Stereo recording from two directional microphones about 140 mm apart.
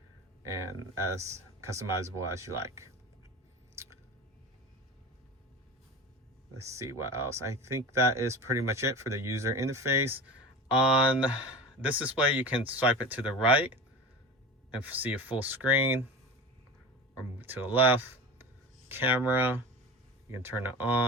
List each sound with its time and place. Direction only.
1.1 s speech: 20° right (ahead or behind)
6.6 s speech: 20° right (ahead or behind)
10.7 s speech: 5° right (ahead or behind)
15.0 s speech: 10° right (ahead or behind)
17.3 s speech: 15° right (ahead or behind)